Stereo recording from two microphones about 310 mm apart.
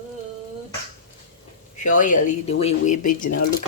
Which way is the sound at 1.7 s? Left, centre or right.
Left.